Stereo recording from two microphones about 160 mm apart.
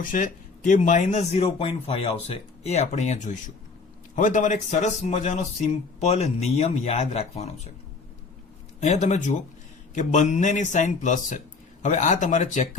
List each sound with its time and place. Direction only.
0.0 s speech: 55° left (ahead or behind)
8.8 s speech: 45° left (ahead or behind)